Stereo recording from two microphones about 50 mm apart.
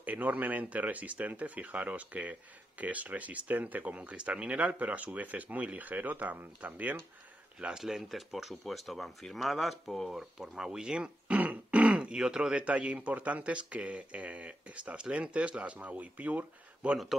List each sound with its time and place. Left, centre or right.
0.0 s speech: right
7.8 s speech: centre
10.1 s speech: centre
11.2 s a sound: right
11.9 s speech: centre
12.5 s speech: right